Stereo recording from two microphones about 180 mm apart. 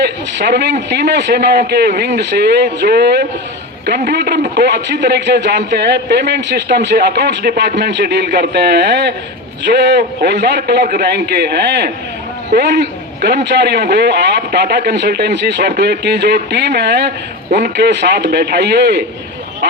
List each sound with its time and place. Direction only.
0.0 s a man's voice: 70° right (ahead or behind)